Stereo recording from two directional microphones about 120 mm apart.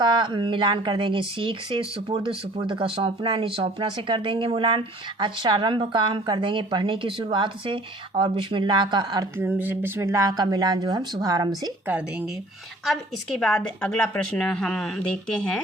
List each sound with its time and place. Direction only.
0.0 s a woman's voice: 40° right (ahead or behind)
9.4 s speech: 15° right (ahead or behind)
10.3 s a woman's voice: 35° right (ahead or behind)
13.4 s a woman's voice: 5° left (ahead or behind)